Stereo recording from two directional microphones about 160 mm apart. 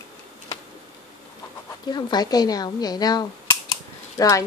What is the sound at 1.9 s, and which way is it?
A woman's voice, 25° left (ahead or behind).